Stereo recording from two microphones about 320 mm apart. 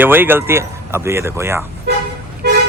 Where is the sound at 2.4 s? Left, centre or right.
Right.